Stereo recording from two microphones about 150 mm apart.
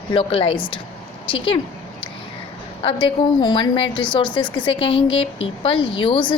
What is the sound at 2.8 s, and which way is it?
A woman's voice, 35° left (ahead or behind).